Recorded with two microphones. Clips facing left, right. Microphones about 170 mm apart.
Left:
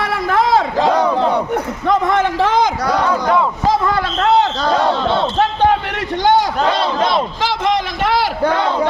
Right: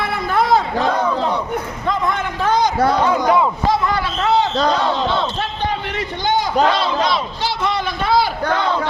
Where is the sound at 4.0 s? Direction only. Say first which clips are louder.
Left 3 dB; 55° left (ahead or behind); by 6.5 s 80° left.